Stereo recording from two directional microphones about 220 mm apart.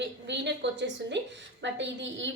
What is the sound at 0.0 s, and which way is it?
A woman's voice, 50° right (ahead or behind).